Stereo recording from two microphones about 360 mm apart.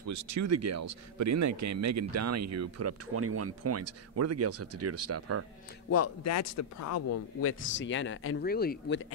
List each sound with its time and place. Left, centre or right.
0.0 s speech: right
5.9 s speech: left
7.6 s speech: left